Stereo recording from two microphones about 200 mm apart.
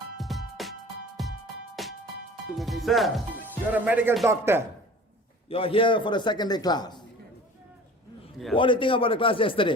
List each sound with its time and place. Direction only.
0.2 s music: centre (ahead or behind)
2.6 s speech: centre (ahead or behind)
5.5 s a man's voice: 25° left (ahead or behind)
8.5 s a man's voice: 25° left (ahead or behind)